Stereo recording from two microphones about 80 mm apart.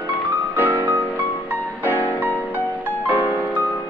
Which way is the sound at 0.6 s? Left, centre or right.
Right.